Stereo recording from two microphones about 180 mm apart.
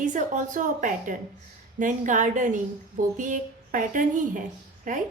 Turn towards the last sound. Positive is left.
turn(degrees=-50)  # may be behind; listen again after turning